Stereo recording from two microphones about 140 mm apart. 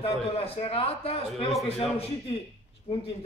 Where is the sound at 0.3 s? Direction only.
45° left (ahead or behind).